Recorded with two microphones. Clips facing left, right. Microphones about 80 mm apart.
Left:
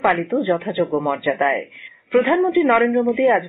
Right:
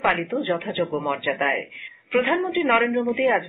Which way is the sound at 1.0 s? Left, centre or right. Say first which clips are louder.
Left 5 dB; left.